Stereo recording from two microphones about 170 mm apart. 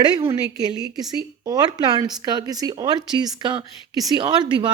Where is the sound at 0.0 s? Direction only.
25° right (ahead or behind).